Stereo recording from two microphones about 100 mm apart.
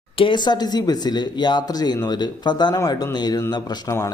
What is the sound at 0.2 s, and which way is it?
A man's voice, 50° left (ahead or behind).